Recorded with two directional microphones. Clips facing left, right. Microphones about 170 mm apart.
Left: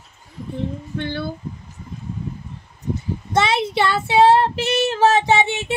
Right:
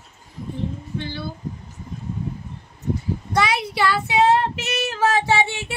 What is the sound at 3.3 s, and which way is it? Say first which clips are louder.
Child singing: left 3 dB; 25° left (ahead or behind).